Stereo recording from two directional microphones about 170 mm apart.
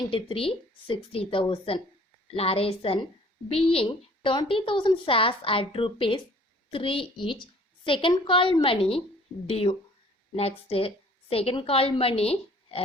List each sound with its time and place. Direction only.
0.1 s a woman's voice: 35° left (ahead or behind)